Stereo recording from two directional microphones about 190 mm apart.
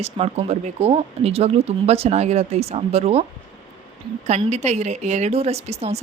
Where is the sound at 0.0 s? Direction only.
35° right (ahead or behind).